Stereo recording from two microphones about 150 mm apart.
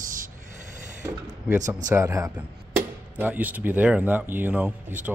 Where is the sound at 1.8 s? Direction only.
20° right (ahead or behind).